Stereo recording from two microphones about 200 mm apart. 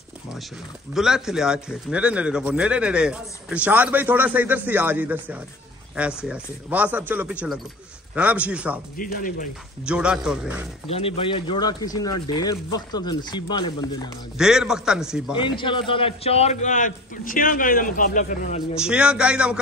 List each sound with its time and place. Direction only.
0.9 s speech: centre (ahead or behind)
8.9 s speech: 45° left (ahead or behind)
9.8 s speech: 5° right (ahead or behind)
10.9 s speech: 30° left (ahead or behind)
14.4 s speech: 5° right (ahead or behind)
15.3 s a man's voice: 25° left (ahead or behind); by 18.6 s 40° left (ahead or behind)
18.8 s speech: 5° right (ahead or behind)